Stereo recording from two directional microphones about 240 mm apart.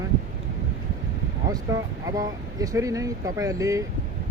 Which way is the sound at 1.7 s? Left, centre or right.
Centre.